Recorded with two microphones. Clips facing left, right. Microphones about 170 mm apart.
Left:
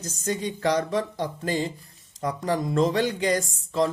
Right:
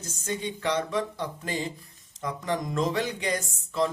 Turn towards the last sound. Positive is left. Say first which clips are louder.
# left 3 dB
turn(degrees=35)  # may be behind; listen again after turning